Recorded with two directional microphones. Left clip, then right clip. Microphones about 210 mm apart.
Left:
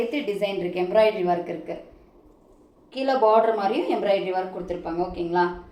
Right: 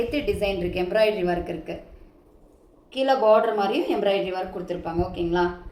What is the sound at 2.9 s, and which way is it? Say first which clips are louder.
A woman's voice: right 1 dB; 15° right (ahead or behind).